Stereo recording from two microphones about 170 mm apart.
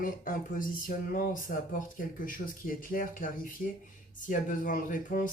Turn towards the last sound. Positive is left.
turn(degrees=50)  # may be behind; listen again after turning